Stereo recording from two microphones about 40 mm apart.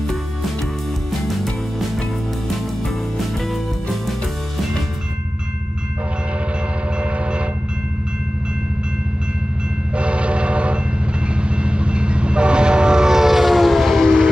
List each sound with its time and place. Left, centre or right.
3.3 s music: centre
7.0 s train: right
9.9 s train: right; by 14.0 s centre
14.0 s train: centre